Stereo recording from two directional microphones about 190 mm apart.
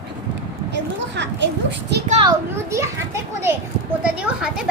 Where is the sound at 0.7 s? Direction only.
65° right (ahead or behind).